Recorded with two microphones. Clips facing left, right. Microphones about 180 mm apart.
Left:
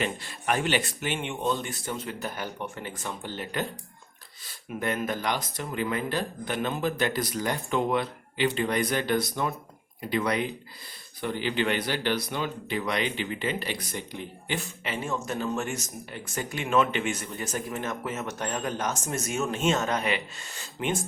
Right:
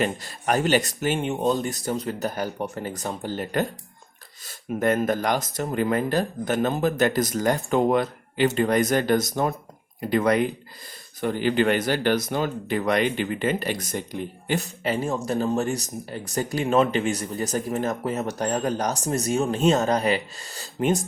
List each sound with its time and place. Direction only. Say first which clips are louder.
0.0 s speech: right 5 dB; 40° right (ahead or behind)